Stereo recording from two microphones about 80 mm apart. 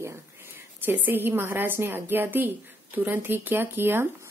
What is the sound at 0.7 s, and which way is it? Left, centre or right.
A woman's voice, right.